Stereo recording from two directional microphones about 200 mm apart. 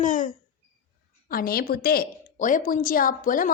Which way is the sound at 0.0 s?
40° left (ahead or behind).